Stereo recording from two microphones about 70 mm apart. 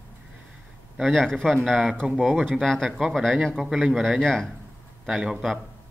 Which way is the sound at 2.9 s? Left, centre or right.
Centre.